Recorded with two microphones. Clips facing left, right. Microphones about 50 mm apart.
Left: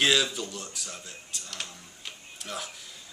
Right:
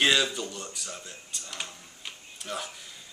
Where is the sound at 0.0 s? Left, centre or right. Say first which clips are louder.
Even; centre.